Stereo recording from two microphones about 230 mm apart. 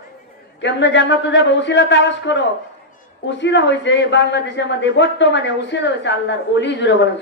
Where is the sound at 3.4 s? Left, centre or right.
Left.